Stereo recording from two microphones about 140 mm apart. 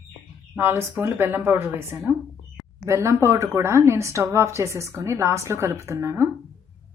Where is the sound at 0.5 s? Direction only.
15° right (ahead or behind).